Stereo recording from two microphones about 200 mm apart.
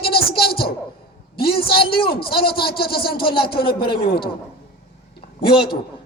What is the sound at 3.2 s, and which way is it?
Speech, 25° left (ahead or behind).